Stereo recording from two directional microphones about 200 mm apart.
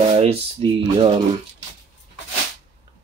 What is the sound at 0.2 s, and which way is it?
Speech, 30° right (ahead or behind).